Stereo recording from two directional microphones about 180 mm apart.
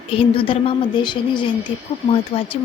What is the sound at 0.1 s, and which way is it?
Speech, 30° left (ahead or behind).